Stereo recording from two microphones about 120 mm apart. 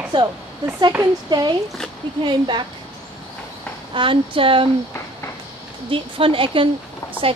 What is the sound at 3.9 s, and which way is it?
Speech, 45° right (ahead or behind).